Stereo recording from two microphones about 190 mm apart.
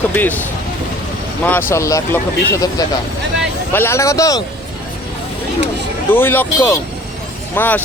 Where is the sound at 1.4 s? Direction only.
10° left (ahead or behind).